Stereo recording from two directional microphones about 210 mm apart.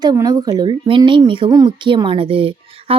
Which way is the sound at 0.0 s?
20° right (ahead or behind).